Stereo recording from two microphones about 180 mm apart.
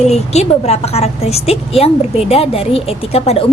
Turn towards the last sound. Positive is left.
turn(degrees=35)  # may be behind; listen again after turning